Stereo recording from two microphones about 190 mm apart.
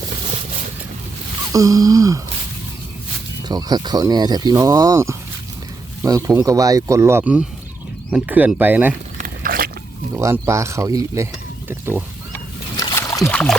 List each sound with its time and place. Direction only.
1.5 s speech: 20° right (ahead or behind)
3.5 s speech: 20° right (ahead or behind)
9.1 s a sound: 50° right (ahead or behind)
10.2 s speech: 15° right (ahead or behind)
12.7 s boat: 20° left (ahead or behind)
13.3 s a sound: 5° left (ahead or behind)